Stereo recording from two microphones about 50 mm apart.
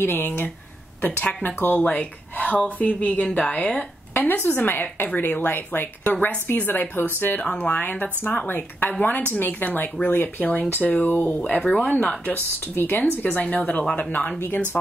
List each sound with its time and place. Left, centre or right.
0.0 s a woman's voice: left
4.1 s a woman's voice: left
7.6 s a woman's voice: left
12.0 s a woman's voice: left
12.7 s speech: left
13.4 s a woman's voice: left